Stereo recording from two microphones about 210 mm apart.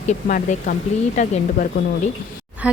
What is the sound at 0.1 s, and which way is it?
Speech, 40° left (ahead or behind).